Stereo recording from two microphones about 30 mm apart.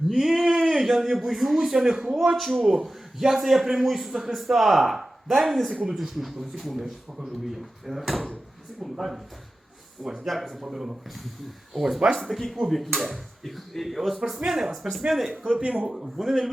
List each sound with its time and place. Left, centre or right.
0.1 s a sound: centre
0.6 s a man's voice: centre
2.3 s a man's voice: centre
10.0 s speech: centre
10.6 s a man's voice: centre
11.9 s speech: right
12.3 s speech: centre
14.3 s a man's voice: centre
14.7 s speech: centre
15.4 s speech: right
15.9 s a man's voice: centre